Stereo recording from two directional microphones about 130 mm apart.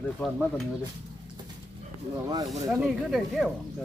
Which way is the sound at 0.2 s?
5° left (ahead or behind).